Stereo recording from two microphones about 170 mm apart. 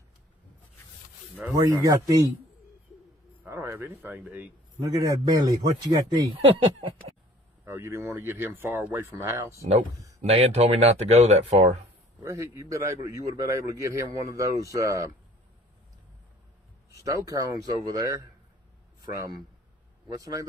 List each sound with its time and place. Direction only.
1.5 s a man's voice: 20° right (ahead or behind)
3.4 s a man's voice: 15° right (ahead or behind)
7.6 s a man's voice: 15° right (ahead or behind)
10.2 s speech: 40° right (ahead or behind)
12.2 s a man's voice: 15° right (ahead or behind)
17.0 s a man's voice: 20° right (ahead or behind)